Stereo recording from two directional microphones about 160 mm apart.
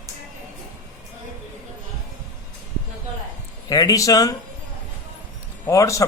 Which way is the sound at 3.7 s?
20° left (ahead or behind).